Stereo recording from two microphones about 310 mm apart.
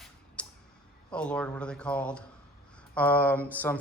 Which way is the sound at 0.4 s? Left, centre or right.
Centre.